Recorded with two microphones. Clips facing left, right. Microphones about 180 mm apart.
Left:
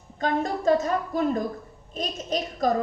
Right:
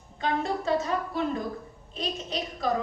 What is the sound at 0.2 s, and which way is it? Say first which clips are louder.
A woman's voice: left 3 dB; 45° left (ahead or behind).